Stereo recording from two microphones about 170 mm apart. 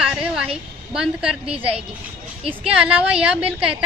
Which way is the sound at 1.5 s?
35° right (ahead or behind).